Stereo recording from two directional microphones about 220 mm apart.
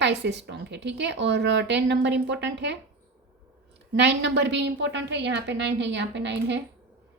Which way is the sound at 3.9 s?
50° right (ahead or behind).